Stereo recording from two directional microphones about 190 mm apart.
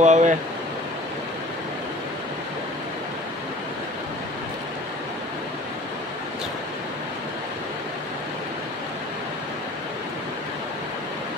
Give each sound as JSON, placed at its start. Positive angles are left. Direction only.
{"t": 0.0, "sound": "speech", "side_deg": -40}